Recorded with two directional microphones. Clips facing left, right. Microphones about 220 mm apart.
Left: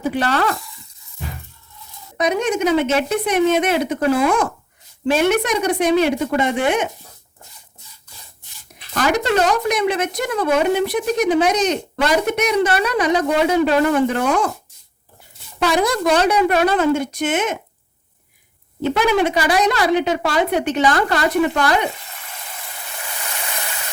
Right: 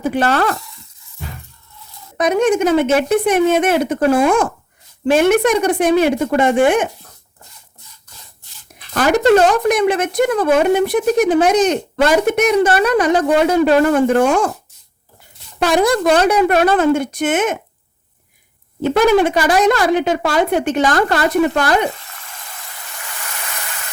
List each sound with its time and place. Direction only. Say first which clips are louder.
0.0 s a woman's voice: right 3 dB; 50° right (ahead or behind)
2.1 s a woman's voice: right 5 dB; 50° right (ahead or behind)
9.0 s a woman's voice: right 6 dB; 50° right (ahead or behind)
15.6 s a woman's voice: right 4 dB; 50° right (ahead or behind)
18.8 s a woman's voice: right 5 dB; 50° right (ahead or behind)